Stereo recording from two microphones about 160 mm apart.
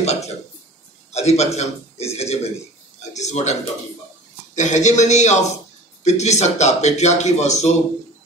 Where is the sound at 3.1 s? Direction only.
45° left (ahead or behind).